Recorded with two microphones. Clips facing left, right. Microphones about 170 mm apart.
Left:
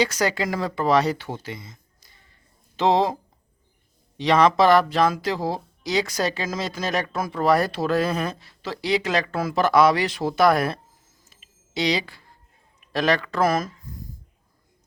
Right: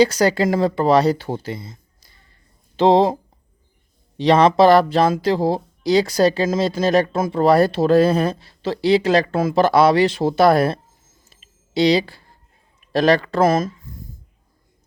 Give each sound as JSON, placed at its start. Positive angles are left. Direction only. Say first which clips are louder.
{"t": 0.0, "sound": "speech", "louder": "right 7 dB", "side_deg": -35}
{"t": 4.2, "sound": "speech", "louder": "right 5 dB", "side_deg": -30}
{"t": 11.3, "sound": "smoke detector", "louder": "right 2 dB", "side_deg": -30}
{"t": 12.8, "sound": "speech", "louder": "right 6 dB", "side_deg": -35}